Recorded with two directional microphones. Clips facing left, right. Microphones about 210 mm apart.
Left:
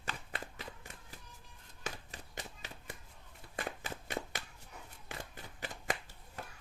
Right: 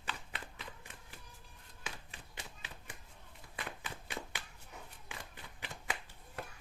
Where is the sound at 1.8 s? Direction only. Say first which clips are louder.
Left 4 dB; 40° left (ahead or behind).